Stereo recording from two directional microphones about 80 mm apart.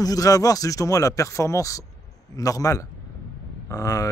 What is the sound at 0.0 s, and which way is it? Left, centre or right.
Speech, left.